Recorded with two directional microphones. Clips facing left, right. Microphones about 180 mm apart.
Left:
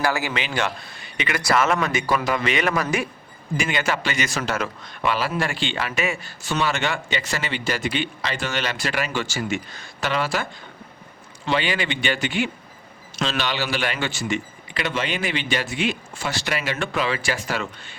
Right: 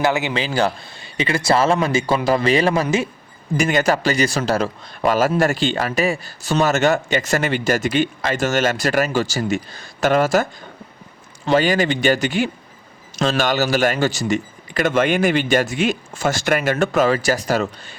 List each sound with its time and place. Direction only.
0.0 s a man's voice: 20° right (ahead or behind)
0.3 s a man's voice: 35° right (ahead or behind)
3.6 s a man's voice: 45° right (ahead or behind)